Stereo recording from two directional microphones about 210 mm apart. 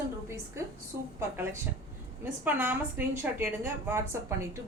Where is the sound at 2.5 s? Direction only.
10° right (ahead or behind).